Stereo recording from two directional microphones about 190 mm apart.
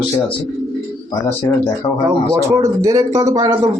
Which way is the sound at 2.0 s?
20° right (ahead or behind).